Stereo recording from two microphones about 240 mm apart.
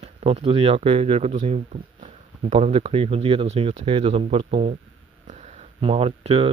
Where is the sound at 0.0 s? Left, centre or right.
Right.